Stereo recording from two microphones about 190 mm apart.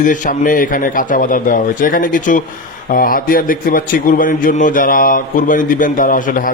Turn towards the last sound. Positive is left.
turn(degrees=45)  # may be behind; listen again after turning